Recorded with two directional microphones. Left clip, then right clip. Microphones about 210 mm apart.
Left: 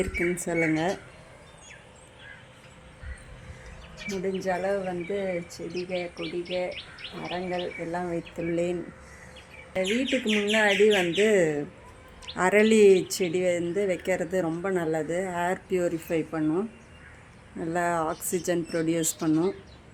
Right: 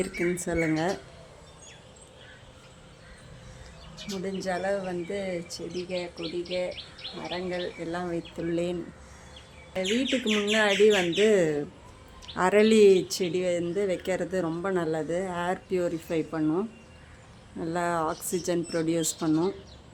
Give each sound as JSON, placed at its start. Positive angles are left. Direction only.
{"t": 0.0, "sound": "speech", "side_deg": 5}
{"t": 4.4, "sound": "speech", "side_deg": 20}